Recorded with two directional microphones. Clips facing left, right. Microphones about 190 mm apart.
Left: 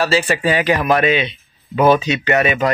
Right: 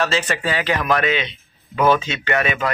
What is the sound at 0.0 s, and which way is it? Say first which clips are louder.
Speech: left 4 dB; 10° left (ahead or behind).